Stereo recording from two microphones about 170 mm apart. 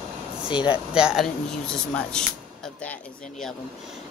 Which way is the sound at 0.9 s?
5° right (ahead or behind).